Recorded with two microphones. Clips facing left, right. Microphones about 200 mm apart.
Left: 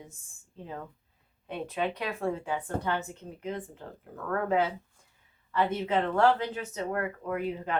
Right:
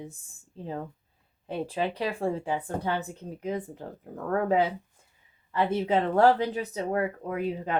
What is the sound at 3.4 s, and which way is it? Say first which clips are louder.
Speech: right 4 dB; 40° right (ahead or behind).